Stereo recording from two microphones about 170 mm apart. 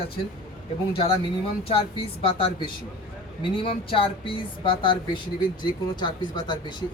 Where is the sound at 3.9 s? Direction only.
30° left (ahead or behind).